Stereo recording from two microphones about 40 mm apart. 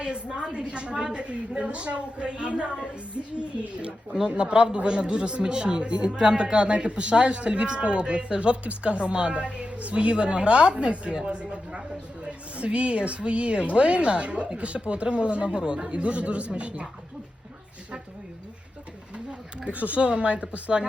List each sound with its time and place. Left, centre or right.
0.0 s a man's voice: centre
4.3 s a man's voice: right
12.5 s a man's voice: right
19.7 s speech: right
20.1 s a man's voice: right